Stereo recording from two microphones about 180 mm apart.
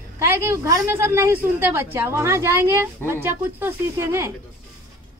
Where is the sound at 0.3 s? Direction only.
15° right (ahead or behind).